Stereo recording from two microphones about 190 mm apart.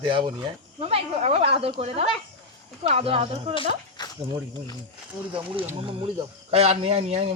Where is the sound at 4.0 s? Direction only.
20° left (ahead or behind).